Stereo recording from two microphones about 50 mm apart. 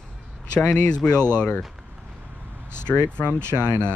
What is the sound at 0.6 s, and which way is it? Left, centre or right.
Speech, left.